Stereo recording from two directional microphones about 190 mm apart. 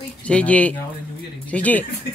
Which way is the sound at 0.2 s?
5° left (ahead or behind).